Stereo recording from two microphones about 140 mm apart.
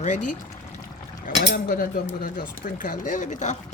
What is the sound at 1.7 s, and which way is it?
Cutlery, 90° left.